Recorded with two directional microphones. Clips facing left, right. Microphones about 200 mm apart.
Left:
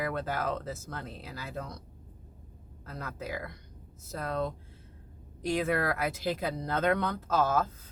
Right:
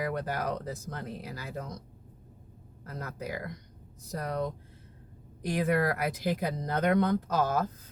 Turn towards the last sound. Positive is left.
turn(degrees=-15)  # may be behind; listen again after turning